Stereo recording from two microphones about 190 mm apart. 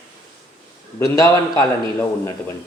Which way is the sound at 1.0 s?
20° left (ahead or behind).